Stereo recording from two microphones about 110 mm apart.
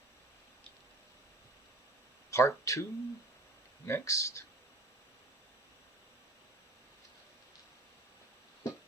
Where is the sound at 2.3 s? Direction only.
25° left (ahead or behind).